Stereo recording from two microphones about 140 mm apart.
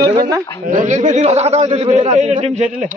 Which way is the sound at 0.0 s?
30° right (ahead or behind).